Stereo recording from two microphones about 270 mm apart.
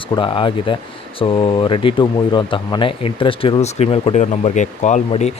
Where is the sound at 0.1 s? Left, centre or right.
Centre.